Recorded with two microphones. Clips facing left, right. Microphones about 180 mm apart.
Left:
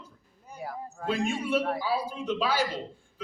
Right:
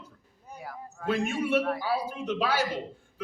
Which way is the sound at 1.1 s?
60° right (ahead or behind).